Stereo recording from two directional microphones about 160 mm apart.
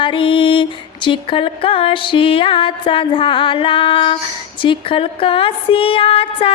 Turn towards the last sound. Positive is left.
turn(degrees=35)  # may be behind; listen again after turning